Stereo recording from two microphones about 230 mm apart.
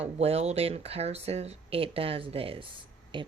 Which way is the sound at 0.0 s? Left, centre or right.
Right.